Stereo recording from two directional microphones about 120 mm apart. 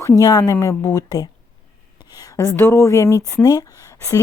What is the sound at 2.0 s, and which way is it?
A woman's voice, 30° left (ahead or behind).